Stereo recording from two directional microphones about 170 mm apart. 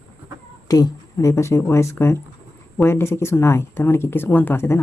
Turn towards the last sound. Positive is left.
turn(degrees=15)  # may be behind; listen again after turning